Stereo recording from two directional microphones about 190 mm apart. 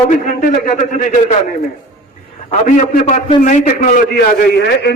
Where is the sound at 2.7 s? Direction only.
45° left (ahead or behind).